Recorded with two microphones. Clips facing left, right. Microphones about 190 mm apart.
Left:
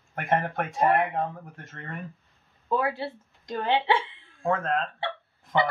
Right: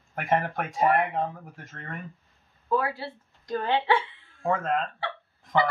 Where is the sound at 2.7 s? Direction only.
25° left (ahead or behind).